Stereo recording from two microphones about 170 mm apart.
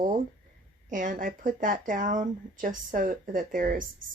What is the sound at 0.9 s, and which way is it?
Speech, 50° right (ahead or behind).